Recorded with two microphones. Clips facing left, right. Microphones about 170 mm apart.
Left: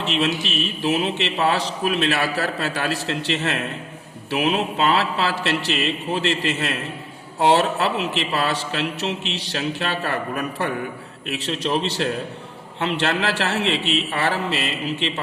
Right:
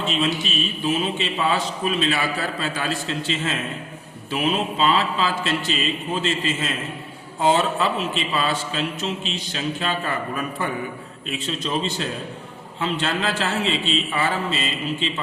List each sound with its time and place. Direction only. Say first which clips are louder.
0.0 s a man's voice: left 1 dB; 70° left (ahead or behind)